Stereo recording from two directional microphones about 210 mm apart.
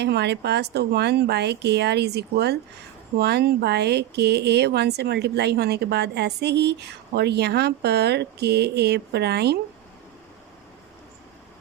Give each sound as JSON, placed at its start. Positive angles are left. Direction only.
{"t": 0.0, "sound": "speech", "side_deg": -55}